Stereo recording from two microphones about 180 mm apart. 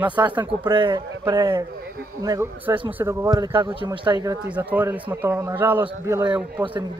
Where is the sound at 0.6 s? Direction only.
25° right (ahead or behind).